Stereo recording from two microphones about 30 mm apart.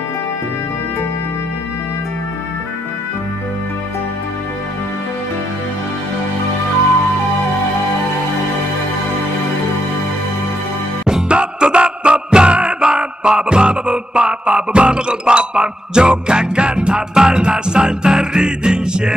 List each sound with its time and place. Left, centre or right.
11.2 s music: right